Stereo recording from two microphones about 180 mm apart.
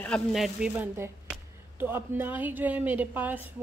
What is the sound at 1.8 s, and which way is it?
A woman's voice, 10° right (ahead or behind).